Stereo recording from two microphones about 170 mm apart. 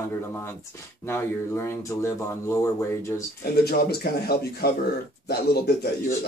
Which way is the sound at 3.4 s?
65° left (ahead or behind).